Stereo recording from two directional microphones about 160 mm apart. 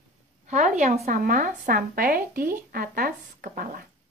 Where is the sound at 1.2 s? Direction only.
55° right (ahead or behind).